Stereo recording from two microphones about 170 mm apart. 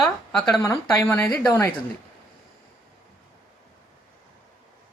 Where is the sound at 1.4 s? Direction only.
15° left (ahead or behind).